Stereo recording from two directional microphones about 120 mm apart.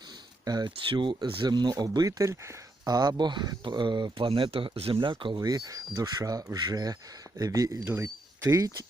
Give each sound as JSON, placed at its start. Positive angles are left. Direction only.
{"t": 0.4, "sound": "speech", "side_deg": -35}
{"t": 5.3, "sound": "speech", "side_deg": -30}